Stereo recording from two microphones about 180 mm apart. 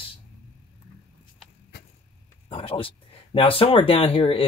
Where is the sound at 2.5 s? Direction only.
30° left (ahead or behind).